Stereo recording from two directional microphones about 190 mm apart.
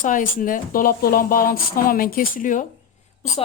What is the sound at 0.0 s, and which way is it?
Speech, 45° left (ahead or behind).